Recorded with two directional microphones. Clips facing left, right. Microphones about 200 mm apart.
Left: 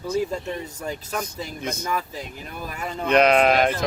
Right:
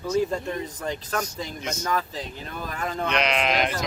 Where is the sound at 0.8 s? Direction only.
10° left (ahead or behind).